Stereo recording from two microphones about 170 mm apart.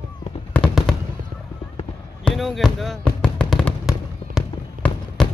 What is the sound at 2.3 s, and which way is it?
Fireworks, centre (ahead or behind).